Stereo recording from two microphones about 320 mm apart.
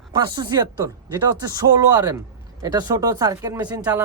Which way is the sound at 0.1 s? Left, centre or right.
Centre.